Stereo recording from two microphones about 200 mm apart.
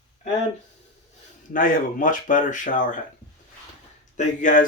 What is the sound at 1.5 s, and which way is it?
Speech, 45° left (ahead or behind).